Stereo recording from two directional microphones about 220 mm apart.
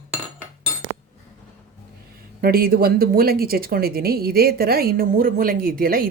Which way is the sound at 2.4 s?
45° right (ahead or behind).